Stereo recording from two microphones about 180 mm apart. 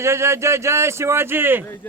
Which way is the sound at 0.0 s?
15° right (ahead or behind).